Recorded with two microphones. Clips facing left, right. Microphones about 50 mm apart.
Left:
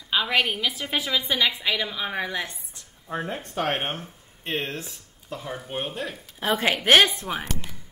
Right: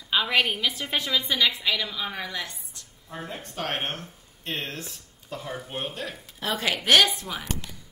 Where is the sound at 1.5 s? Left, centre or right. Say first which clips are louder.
Left 1 dB; left; by 6.4 s centre.